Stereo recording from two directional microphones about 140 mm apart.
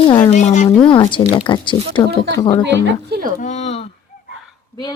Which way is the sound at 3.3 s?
60° left (ahead or behind).